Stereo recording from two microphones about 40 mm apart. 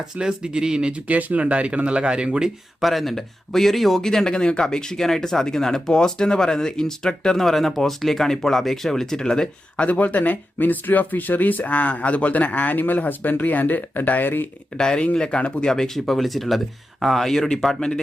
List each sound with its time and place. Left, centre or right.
0.2 s speech: centre
1.0 s speech: right
2.8 s speech: centre
7.4 s speech: centre
9.7 s speech: left
12.8 s speech: left
14.8 s speech: centre
15.6 s speech: centre
17.7 s speech: centre